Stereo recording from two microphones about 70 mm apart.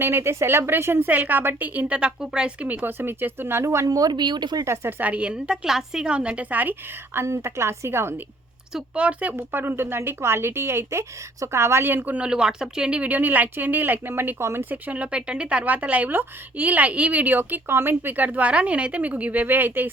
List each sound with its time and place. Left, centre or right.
0.0 s a woman's voice: right; by 2.6 s centre
2.6 s a woman's voice: right
3.9 s speech: right
4.6 s a woman's voice: right
4.9 s a woman's voice: right
8.7 s speech: centre
9.3 s a woman's voice: right
12.1 s a woman's voice: centre; by 14.6 s right
14.7 s a woman's voice: right